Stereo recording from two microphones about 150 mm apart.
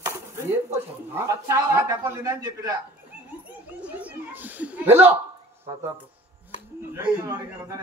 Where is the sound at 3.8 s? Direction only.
10° right (ahead or behind).